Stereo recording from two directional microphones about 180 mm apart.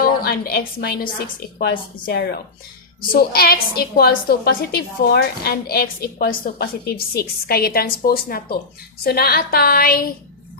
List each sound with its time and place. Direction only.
0.0 s a woman's voice: 55° left (ahead or behind)